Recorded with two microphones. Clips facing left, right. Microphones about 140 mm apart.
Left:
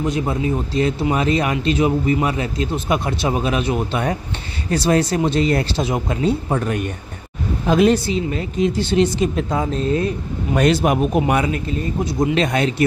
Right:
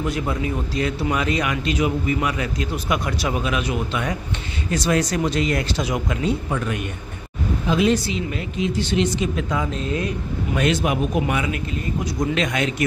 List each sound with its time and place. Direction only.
0.0 s speech: 25° left (ahead or behind)
7.6 s speech: 50° left (ahead or behind)
8.3 s speech: 35° left (ahead or behind)